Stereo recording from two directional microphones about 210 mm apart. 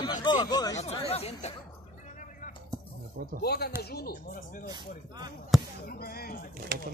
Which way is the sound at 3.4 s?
50° left (ahead or behind).